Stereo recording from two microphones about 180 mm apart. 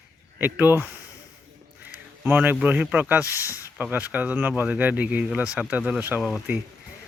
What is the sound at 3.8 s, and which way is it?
Speech, 10° right (ahead or behind).